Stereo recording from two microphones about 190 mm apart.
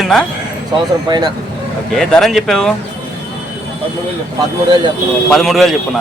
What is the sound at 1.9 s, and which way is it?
Speech, centre (ahead or behind).